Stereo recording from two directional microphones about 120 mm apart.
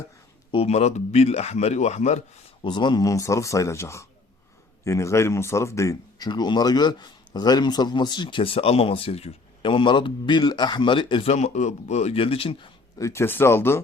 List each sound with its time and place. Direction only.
0.5 s a man's voice: 60° left (ahead or behind)
2.6 s speech: 40° left (ahead or behind)
11.3 s a man's voice: 70° left (ahead or behind); by 12.7 s 50° left (ahead or behind)
13.0 s speech: 25° left (ahead or behind)